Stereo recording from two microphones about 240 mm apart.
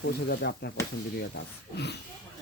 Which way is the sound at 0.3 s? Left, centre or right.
Left.